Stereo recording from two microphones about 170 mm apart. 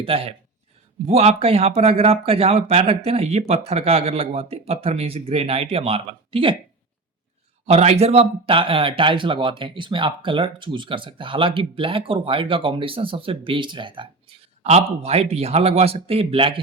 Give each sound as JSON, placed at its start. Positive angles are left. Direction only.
{"t": 0.0, "sound": "speech", "side_deg": -35}
{"t": 7.7, "sound": "speech", "side_deg": -40}